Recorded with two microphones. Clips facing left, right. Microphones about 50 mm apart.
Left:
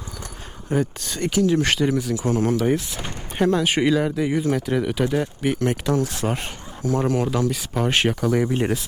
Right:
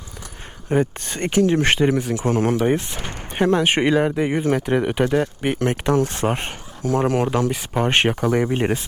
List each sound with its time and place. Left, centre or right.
0.7 s speech: right
7.5 s speech: right